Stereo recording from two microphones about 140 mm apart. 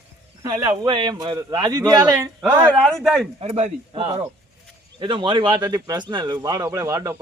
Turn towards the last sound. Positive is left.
turn(degrees=-20)  # may be behind; listen again after turning